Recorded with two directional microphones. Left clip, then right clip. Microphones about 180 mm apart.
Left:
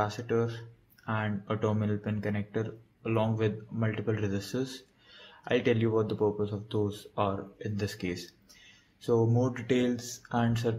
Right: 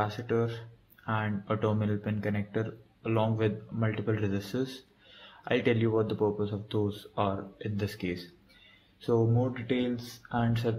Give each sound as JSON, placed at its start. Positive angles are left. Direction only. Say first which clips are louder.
{"t": 0.0, "sound": "speech", "louder": "even", "side_deg": 5}
{"t": 9.4, "sound": "speech", "louder": "left 2 dB", "side_deg": 20}